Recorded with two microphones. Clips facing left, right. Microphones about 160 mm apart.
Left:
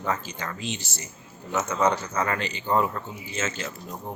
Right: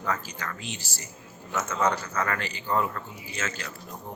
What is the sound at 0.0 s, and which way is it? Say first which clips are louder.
A man's voice: left 2 dB; 25° left (ahead or behind).